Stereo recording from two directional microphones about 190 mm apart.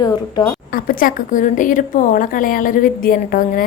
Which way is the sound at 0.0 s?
20° left (ahead or behind).